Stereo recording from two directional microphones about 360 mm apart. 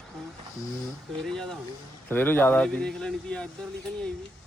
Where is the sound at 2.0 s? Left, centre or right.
Centre.